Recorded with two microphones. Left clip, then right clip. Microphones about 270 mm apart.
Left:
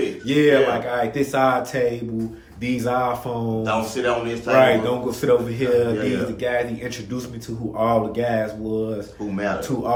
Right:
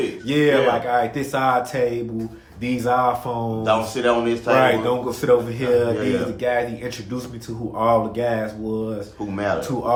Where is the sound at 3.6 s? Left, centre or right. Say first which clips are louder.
Right 4 dB; right.